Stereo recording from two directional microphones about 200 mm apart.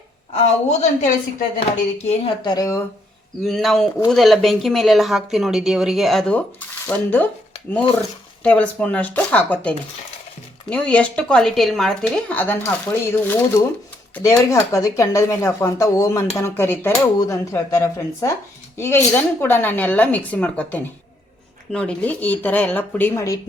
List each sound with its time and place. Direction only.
0.3 s a woman's voice: 35° left (ahead or behind); by 2.8 s 15° left (ahead or behind)
3.4 s speech: centre (ahead or behind)
8.4 s speech: 5° left (ahead or behind)